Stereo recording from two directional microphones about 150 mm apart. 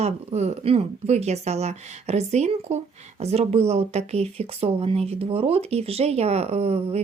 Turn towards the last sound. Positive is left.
turn(degrees=-45)  # may be behind; listen again after turning